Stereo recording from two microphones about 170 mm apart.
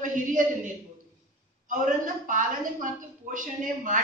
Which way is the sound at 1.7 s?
50° right (ahead or behind).